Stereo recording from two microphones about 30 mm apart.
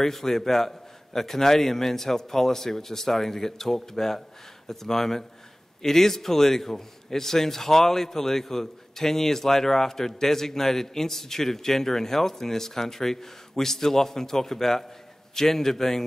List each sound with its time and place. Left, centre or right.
0.0 s a man's voice: centre